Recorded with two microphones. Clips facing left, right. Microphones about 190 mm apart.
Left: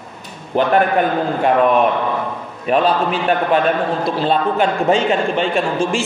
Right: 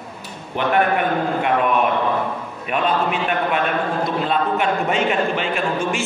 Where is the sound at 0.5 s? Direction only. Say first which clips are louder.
Left 6 dB; 35° left (ahead or behind).